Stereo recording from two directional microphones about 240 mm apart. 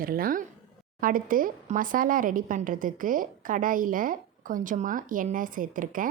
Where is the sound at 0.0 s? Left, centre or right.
Right.